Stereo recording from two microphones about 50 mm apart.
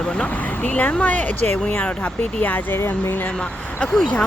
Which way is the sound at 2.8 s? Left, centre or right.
Left.